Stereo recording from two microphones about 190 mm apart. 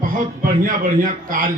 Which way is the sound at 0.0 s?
45° right (ahead or behind).